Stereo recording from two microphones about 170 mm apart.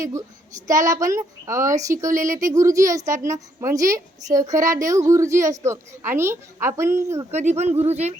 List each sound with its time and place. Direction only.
0.0 s speech: 20° right (ahead or behind)
7.3 s speech: 40° right (ahead or behind)